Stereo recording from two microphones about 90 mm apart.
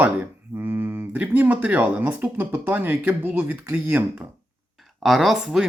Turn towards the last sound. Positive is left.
turn(degrees=-5)  # may be behind; listen again after turning